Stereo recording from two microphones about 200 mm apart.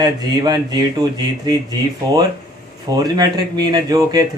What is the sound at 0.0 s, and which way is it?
Speech, 20° right (ahead or behind).